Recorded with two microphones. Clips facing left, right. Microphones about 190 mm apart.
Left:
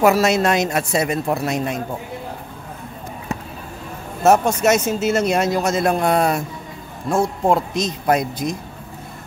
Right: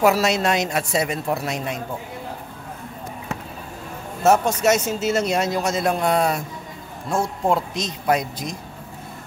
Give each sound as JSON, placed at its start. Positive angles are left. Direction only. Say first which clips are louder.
{"t": 0.0, "sound": "speech", "louder": "left 3 dB", "side_deg": 50}
{"t": 4.2, "sound": "speech", "louder": "left 2 dB", "side_deg": 55}